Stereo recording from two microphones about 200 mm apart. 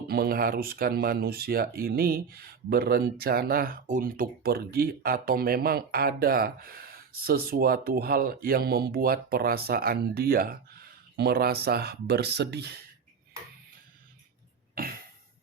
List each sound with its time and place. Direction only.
0.1 s speech: 50° right (ahead or behind)